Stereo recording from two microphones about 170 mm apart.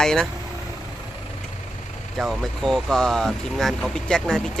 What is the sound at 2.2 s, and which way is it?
Speech, centre (ahead or behind).